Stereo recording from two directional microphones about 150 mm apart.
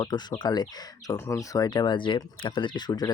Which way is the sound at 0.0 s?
30° left (ahead or behind).